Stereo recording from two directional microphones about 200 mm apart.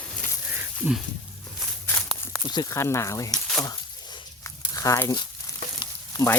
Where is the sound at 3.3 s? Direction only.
Centre (ahead or behind).